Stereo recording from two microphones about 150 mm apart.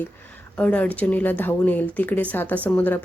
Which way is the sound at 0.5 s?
10° left (ahead or behind).